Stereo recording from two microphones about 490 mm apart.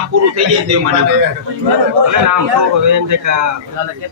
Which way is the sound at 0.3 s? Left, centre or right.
Right.